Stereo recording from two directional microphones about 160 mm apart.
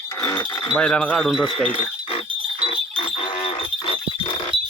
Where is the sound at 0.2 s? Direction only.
20° left (ahead or behind).